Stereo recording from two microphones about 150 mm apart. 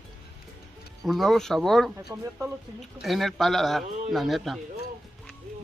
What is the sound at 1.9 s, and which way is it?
Speech, 20° right (ahead or behind).